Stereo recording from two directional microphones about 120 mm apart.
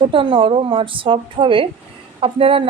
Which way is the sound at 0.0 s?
45° right (ahead or behind).